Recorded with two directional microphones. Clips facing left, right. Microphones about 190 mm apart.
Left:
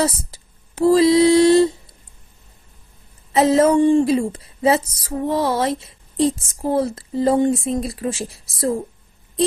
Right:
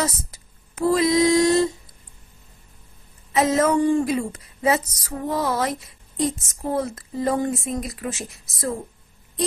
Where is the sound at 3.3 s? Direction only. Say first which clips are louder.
Left 5 dB; 30° left (ahead or behind).